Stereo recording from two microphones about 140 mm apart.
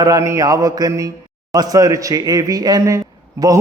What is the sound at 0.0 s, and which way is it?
A man's voice, 25° right (ahead or behind).